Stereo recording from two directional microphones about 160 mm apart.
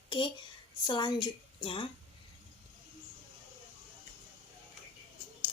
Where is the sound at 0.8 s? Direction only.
30° left (ahead or behind).